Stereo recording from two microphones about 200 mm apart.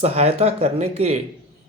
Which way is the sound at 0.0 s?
30° right (ahead or behind).